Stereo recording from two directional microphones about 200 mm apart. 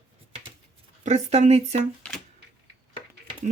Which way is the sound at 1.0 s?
35° right (ahead or behind).